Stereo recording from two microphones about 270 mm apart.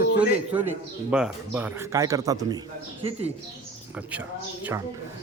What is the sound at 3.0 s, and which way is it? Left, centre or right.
Speech, right.